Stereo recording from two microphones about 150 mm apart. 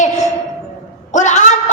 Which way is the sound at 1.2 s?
55° left (ahead or behind).